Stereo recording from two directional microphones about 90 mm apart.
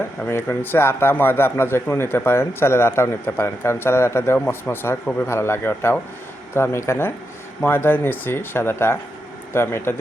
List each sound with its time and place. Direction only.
0.3 s a man's voice: 25° left (ahead or behind)